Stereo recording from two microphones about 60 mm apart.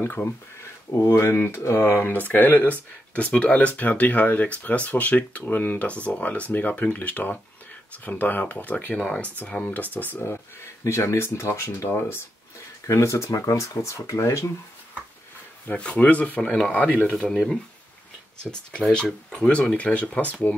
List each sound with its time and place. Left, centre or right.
0.0 s speech: left
0.9 s speech: left
2.0 s speech: left
10.2 s speech: left
11.9 s speech: left
12.8 s speech: left
13.3 s speech: left
15.7 s speech: left
16.4 s speech: centre
16.7 s speech: left
17.1 s speech: centre
18.5 s speech: centre